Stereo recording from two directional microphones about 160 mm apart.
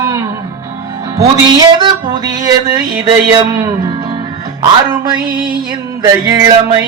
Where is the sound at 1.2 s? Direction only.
25° right (ahead or behind).